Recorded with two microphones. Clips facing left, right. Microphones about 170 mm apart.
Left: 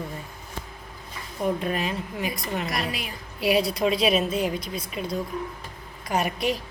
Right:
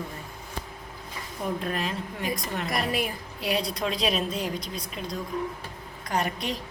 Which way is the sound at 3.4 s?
5° left (ahead or behind).